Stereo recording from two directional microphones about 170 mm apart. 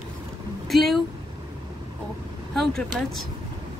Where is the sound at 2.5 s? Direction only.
Centre (ahead or behind).